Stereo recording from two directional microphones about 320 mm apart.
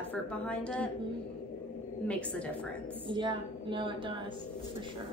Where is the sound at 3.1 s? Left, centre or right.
Centre.